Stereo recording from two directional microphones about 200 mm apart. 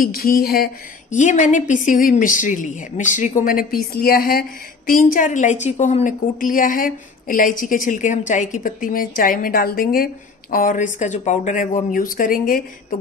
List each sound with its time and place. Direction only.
0.0 s a woman's voice: 50° left (ahead or behind)
1.1 s a woman's voice: 40° left (ahead or behind)